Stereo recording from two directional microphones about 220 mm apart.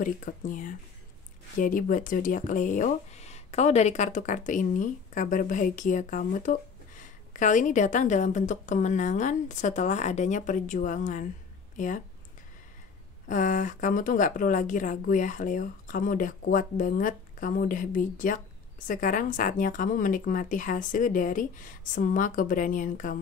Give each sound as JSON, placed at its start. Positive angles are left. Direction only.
{"t": 0.0, "sound": "speech", "side_deg": 35}
{"t": 13.3, "sound": "speech", "side_deg": 35}